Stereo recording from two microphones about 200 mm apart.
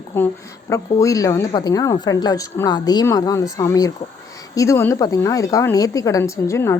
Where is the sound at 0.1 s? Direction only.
10° left (ahead or behind).